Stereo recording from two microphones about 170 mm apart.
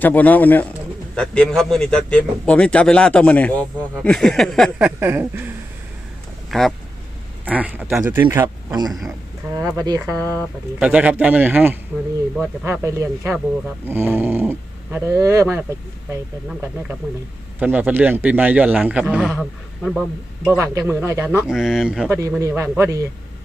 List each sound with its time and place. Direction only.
0.0 s a man's voice: 10° left (ahead or behind)
4.9 s speech: 15° right (ahead or behind)
6.5 s speech: centre (ahead or behind)
8.3 s speech: 20° right (ahead or behind)
8.9 s a man's voice: centre (ahead or behind)
9.5 s speech: 20° right (ahead or behind)
10.2 s a man's voice: 10° left (ahead or behind)
10.8 s a man's voice: 5° right (ahead or behind)
20.6 s speech: 15° right (ahead or behind)
21.4 s a man's voice: centre (ahead or behind)
22.4 s speech: 15° right (ahead or behind)